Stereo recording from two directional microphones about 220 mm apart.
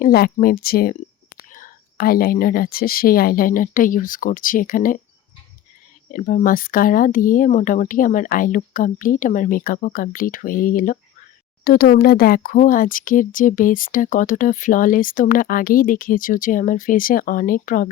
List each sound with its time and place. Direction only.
0.0 s speech: 40° left (ahead or behind)
6.1 s speech: 40° left (ahead or behind)